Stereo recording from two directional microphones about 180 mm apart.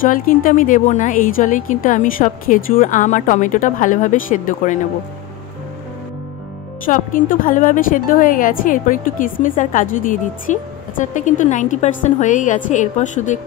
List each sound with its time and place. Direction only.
0.0 s a woman's voice: 50° left (ahead or behind)
6.9 s a woman's voice: 50° left (ahead or behind)